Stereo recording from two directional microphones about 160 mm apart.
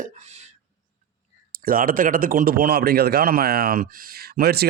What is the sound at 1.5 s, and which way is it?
A man's voice, 65° right (ahead or behind).